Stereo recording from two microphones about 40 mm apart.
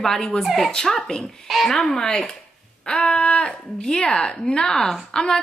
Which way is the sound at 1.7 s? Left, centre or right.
Centre.